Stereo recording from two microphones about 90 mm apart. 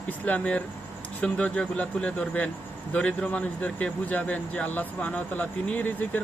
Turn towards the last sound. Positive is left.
turn(degrees=20)  # may be behind; listen again after turning